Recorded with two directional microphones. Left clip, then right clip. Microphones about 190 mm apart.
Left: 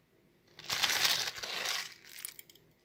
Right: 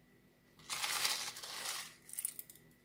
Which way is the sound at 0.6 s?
50° left (ahead or behind).